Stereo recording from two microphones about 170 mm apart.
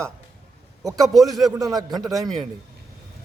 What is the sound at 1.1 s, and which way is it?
Speech, centre (ahead or behind).